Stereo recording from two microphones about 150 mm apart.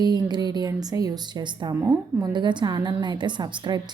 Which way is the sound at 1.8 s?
15° right (ahead or behind).